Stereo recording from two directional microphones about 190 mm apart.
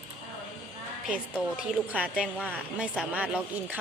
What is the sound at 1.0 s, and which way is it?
Speech, 5° right (ahead or behind).